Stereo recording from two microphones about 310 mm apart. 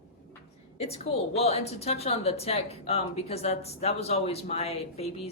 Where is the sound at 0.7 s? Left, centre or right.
Centre.